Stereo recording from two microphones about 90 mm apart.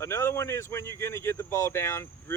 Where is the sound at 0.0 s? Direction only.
30° left (ahead or behind).